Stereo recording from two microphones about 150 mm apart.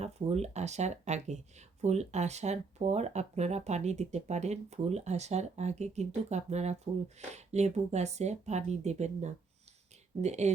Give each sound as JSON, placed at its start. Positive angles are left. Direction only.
{"t": 0.0, "sound": "speech", "side_deg": -45}